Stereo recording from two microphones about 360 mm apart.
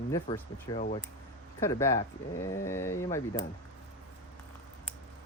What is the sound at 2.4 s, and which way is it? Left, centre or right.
Speech, centre.